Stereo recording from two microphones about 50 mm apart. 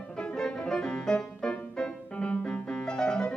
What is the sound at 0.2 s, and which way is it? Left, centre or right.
Music, centre.